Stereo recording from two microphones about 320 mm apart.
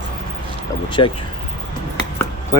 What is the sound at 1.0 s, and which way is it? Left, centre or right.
Speech, centre.